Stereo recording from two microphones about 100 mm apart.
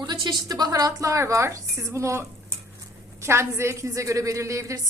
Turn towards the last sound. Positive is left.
turn(degrees=-30)  # may be behind; listen again after turning